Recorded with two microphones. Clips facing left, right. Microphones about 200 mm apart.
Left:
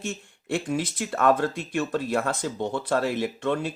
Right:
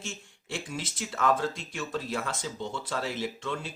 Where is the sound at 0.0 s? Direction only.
55° left (ahead or behind).